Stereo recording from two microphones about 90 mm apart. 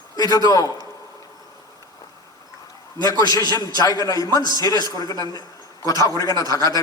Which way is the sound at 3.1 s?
45° left (ahead or behind).